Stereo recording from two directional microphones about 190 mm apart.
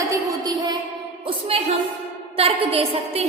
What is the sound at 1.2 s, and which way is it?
A woman's voice, 30° right (ahead or behind).